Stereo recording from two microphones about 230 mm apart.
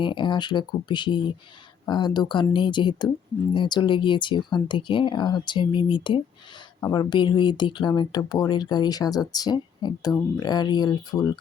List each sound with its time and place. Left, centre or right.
0.0 s speech: left